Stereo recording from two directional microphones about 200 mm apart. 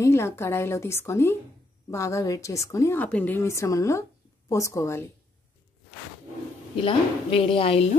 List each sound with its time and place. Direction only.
0.0 s a woman's voice: 15° left (ahead or behind)
6.8 s speech: 25° left (ahead or behind)